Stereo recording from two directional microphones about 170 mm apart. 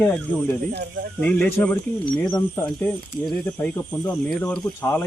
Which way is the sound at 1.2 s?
10° left (ahead or behind).